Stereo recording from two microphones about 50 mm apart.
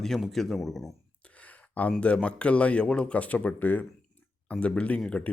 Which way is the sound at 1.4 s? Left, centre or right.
Left.